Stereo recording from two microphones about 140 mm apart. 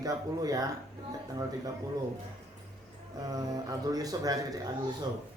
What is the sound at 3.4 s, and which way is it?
A man's voice, 25° right (ahead or behind).